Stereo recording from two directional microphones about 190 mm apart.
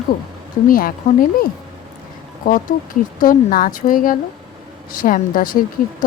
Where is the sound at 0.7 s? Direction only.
50° left (ahead or behind).